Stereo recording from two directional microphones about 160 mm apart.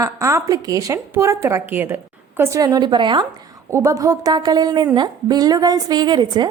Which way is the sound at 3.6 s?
20° right (ahead or behind).